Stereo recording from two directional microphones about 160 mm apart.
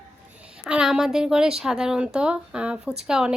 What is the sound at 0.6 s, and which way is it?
Speech, 5° right (ahead or behind).